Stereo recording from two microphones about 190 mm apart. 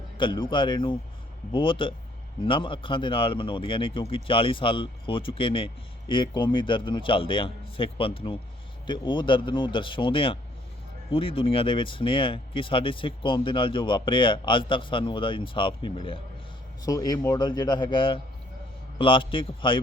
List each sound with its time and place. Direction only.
0.2 s a man's voice: 25° left (ahead or behind)